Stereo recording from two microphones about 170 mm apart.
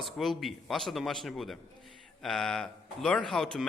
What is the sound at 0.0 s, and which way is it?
A man's voice, centre (ahead or behind).